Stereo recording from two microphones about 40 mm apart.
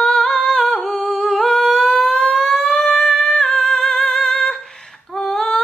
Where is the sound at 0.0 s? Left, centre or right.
Centre.